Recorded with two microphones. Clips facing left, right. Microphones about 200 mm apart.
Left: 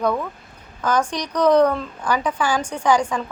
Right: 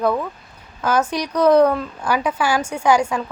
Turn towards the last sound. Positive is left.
turn(degrees=-10)  # may be behind; listen again after turning